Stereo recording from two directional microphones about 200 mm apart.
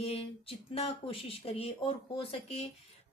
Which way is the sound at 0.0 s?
30° left (ahead or behind).